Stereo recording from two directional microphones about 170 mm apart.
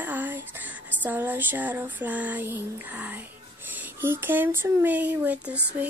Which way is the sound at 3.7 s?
10° right (ahead or behind).